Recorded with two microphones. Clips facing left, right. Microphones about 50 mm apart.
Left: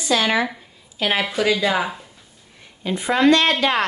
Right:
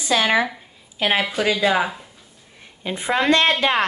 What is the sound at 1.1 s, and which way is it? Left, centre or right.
Speech, centre.